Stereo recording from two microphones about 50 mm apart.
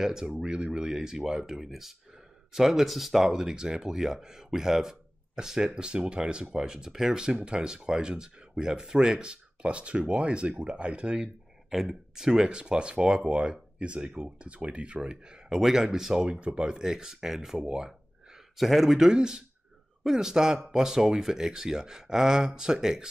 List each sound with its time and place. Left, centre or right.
0.0 s speech: centre
11.7 s speech: centre
16.3 s speech: right
18.6 s speech: centre